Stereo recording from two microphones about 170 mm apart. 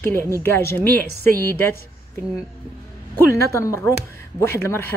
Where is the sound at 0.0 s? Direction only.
15° left (ahead or behind).